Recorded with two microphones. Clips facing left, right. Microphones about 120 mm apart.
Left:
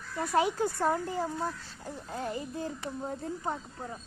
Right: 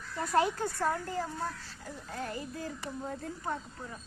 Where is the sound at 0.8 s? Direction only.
20° left (ahead or behind).